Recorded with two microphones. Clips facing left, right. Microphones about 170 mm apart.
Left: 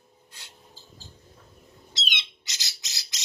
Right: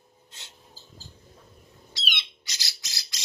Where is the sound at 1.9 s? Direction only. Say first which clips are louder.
Even; 20° left (ahead or behind).